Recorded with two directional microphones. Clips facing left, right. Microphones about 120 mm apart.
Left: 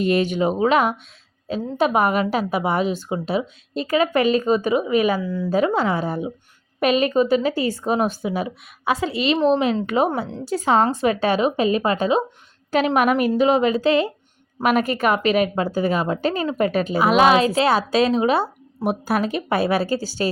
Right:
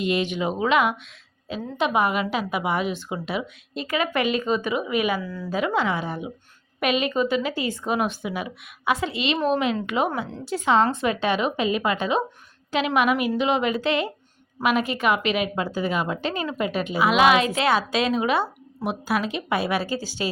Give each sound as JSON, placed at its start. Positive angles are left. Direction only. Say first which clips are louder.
{"t": 0.0, "sound": "a woman's voice", "louder": "left 5 dB", "side_deg": 45}
{"t": 5.2, "sound": "speech", "louder": "left 7 dB", "side_deg": 20}
{"t": 5.5, "sound": "a woman's voice", "louder": "left 4 dB", "side_deg": 35}
{"t": 14.6, "sound": "a woman's voice", "louder": "left 3 dB", "side_deg": 45}